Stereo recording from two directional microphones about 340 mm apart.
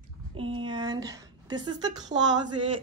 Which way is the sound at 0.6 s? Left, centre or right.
Centre.